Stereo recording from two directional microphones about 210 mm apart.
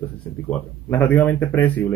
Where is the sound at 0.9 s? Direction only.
10° left (ahead or behind).